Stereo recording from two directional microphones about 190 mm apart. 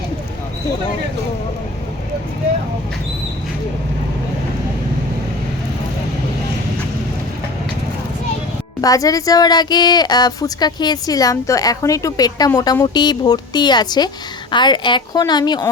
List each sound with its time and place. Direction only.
8.8 s a woman's voice: 20° left (ahead or behind)